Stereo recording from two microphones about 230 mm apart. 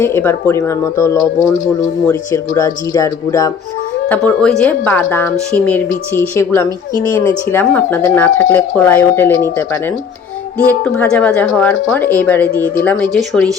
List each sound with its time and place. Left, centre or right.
0.0 s speech: centre